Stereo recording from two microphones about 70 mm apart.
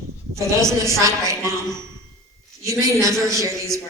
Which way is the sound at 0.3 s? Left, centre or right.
Right.